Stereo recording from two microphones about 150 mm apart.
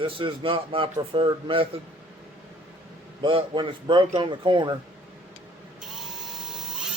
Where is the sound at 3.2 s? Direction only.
35° right (ahead or behind).